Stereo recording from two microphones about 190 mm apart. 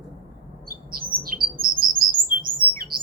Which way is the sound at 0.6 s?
50° right (ahead or behind).